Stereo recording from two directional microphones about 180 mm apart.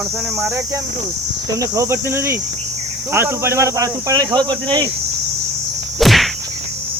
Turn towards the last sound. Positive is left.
turn(degrees=0)  # may be behind; listen again after turning